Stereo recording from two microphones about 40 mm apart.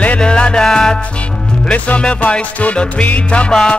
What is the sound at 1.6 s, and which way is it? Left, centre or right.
Music, left.